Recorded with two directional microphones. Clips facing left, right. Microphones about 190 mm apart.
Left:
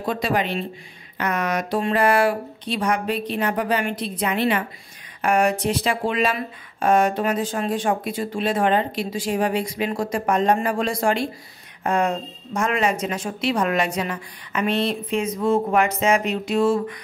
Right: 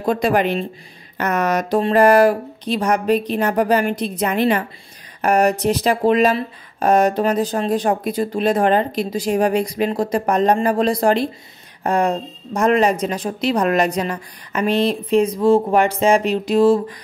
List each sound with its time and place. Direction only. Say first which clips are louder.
0.0 s speech: right 6 dB; 50° right (ahead or behind)